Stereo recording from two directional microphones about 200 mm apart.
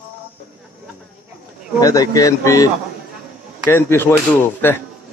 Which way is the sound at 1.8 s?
15° left (ahead or behind).